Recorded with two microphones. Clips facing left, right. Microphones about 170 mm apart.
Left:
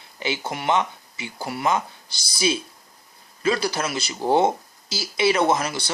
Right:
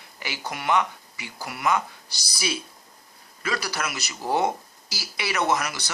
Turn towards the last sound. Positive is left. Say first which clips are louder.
# left 3 dB
turn(degrees=30)  # may be behind; listen again after turning